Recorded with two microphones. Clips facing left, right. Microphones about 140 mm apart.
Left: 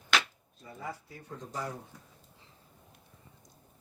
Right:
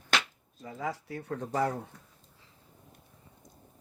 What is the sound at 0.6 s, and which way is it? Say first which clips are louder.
Speech: right 6 dB; 90° right.